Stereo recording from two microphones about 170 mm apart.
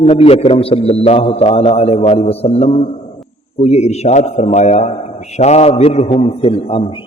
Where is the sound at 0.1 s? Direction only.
35° left (ahead or behind).